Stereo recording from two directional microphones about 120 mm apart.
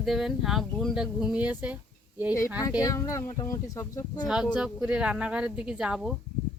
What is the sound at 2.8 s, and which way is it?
Speech, 25° left (ahead or behind).